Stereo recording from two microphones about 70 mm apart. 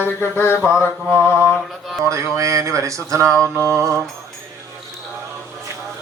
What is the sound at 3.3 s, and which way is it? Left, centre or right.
Mantra, centre.